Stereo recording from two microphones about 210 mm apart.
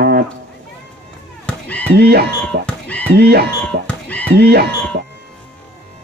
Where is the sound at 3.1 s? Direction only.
50° right (ahead or behind).